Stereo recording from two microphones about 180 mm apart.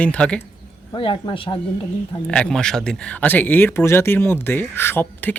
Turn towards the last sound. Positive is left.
turn(degrees=10)  # may be behind; listen again after turning